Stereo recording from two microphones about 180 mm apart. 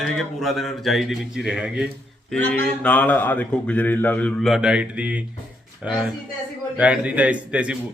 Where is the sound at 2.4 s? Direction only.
10° left (ahead or behind).